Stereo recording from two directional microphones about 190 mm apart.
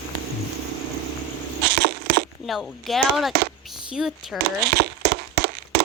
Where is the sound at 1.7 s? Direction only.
65° right (ahead or behind).